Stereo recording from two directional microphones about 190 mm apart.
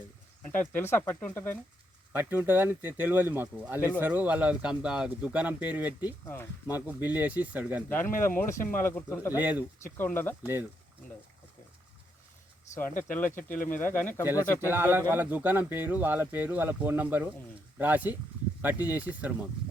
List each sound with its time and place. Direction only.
0.6 s speech: 10° left (ahead or behind)
2.1 s speech: 10° right (ahead or behind)
6.2 s speech: 10° left (ahead or behind)
6.7 s speech: 10° right (ahead or behind)
7.9 s speech: 10° left (ahead or behind)
9.4 s speech: 10° right (ahead or behind)
9.8 s speech: 10° left (ahead or behind)
10.4 s speech: 10° right (ahead or behind)
13.1 s speech: 10° left (ahead or behind)
13.6 s speech: 45° left (ahead or behind)
13.8 s speech: 10° left (ahead or behind)
14.7 s speech: 10° right (ahead or behind)